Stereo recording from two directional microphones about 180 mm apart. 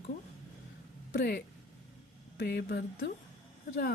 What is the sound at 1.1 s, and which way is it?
Speech, 65° left (ahead or behind).